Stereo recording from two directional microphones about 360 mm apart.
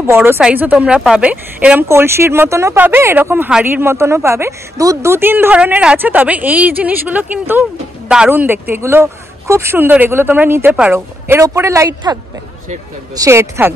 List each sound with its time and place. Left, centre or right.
0.0 s a woman's voice: centre